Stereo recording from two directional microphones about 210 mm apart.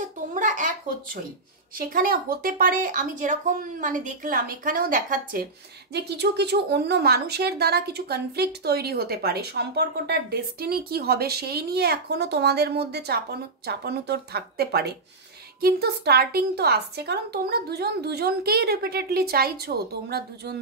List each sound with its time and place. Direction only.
0.3 s a sound: 35° right (ahead or behind)
1.8 s speech: 45° right (ahead or behind)
5.9 s a woman's voice: 50° right (ahead or behind)